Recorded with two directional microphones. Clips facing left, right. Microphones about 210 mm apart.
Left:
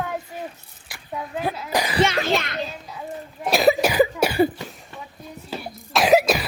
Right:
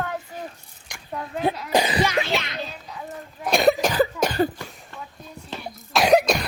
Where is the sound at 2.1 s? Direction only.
50° left (ahead or behind).